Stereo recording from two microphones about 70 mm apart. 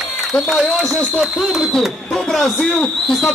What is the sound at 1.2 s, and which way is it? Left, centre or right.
A man's voice, centre.